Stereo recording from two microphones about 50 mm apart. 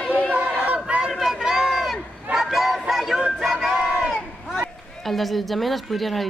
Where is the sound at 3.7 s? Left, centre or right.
Centre.